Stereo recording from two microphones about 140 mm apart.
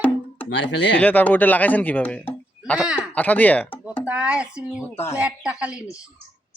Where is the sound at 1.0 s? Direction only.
10° left (ahead or behind).